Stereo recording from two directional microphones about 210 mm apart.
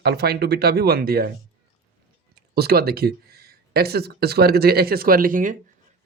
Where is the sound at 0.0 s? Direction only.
50° right (ahead or behind).